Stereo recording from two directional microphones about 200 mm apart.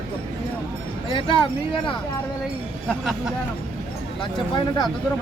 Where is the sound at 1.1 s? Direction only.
25° left (ahead or behind).